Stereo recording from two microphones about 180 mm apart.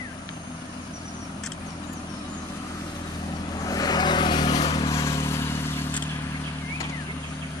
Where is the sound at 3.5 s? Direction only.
20° left (ahead or behind).